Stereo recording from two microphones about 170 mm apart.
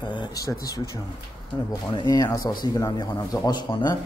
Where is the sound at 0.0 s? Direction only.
25° left (ahead or behind).